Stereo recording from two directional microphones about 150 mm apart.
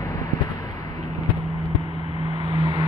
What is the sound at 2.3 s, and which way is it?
Vehicle, 30° right (ahead or behind).